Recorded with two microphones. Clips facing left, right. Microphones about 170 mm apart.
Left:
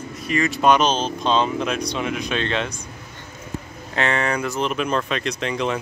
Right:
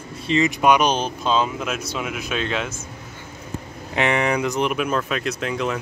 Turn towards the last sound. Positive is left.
turn(degrees=-5)  # may be behind; listen again after turning